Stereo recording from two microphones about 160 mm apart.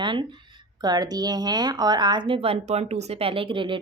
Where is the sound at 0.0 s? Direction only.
30° right (ahead or behind).